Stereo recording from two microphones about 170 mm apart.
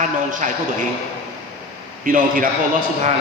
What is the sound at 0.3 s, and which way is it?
Speech, 50° right (ahead or behind).